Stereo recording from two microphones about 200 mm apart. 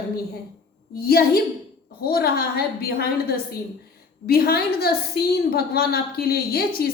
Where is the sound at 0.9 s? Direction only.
50° left (ahead or behind).